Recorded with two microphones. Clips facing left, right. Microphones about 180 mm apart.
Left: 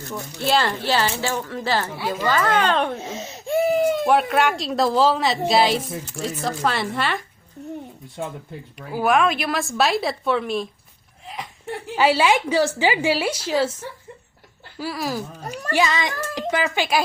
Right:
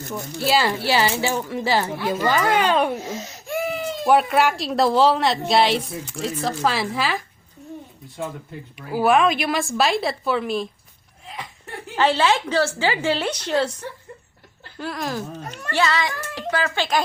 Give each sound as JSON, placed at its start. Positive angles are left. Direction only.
{"t": 0.1, "sound": "speech", "side_deg": -5}
{"t": 3.0, "sound": "wheeze", "side_deg": 25}
{"t": 4.0, "sound": "speech", "side_deg": 0}
{"t": 8.9, "sound": "speech", "side_deg": -5}
{"t": 11.9, "sound": "speech", "side_deg": 10}
{"t": 14.8, "sound": "speech", "side_deg": 5}